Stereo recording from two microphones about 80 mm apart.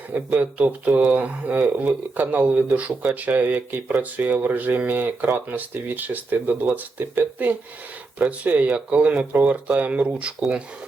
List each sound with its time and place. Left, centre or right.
0.1 s speech: centre